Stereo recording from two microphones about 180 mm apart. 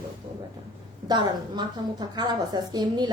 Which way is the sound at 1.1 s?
25° right (ahead or behind).